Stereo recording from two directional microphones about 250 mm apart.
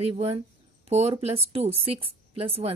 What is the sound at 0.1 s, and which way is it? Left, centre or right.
A woman's voice, right.